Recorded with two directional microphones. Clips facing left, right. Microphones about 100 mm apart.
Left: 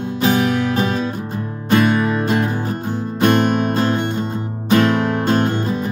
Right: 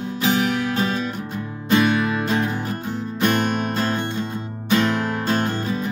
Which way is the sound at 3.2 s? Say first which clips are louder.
Left 6 dB; 50° left (ahead or behind).